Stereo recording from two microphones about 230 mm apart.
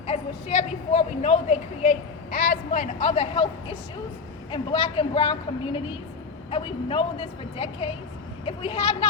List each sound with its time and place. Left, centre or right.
0.1 s a woman's voice: left